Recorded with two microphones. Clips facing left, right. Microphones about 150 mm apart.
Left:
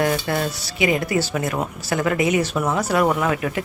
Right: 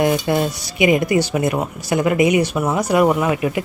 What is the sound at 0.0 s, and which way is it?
Speech, 15° right (ahead or behind).